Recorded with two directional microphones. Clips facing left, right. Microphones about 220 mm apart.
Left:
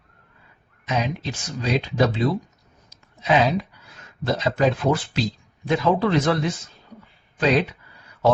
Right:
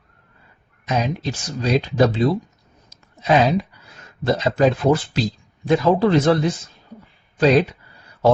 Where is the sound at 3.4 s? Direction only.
Centre (ahead or behind).